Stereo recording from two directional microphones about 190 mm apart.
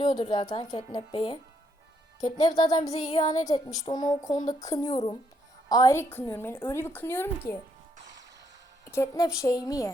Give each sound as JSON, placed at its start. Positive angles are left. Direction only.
{"t": 0.0, "sound": "a woman's voice", "side_deg": 20}
{"t": 8.9, "sound": "a woman's voice", "side_deg": 15}